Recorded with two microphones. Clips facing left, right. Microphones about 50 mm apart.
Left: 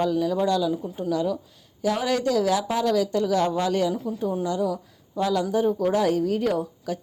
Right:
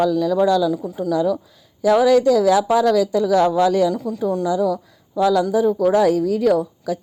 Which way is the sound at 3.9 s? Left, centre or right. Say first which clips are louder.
Right 5 dB; right.